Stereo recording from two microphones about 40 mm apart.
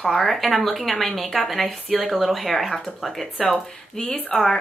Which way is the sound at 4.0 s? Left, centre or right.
Centre.